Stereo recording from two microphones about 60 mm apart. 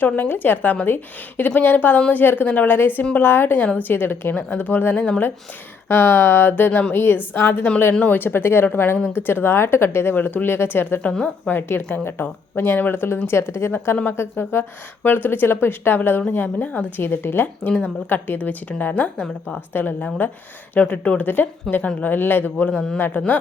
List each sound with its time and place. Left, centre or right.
0.0 s speech: left
4.4 s a woman's voice: left
5.9 s speech: left
13.9 s a woman's voice: left
19.1 s a woman's voice: centre
19.7 s a woman's voice: left